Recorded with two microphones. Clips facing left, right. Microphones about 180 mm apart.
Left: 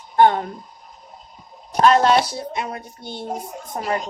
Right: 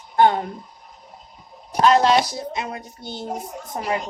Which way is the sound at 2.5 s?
20° right (ahead or behind).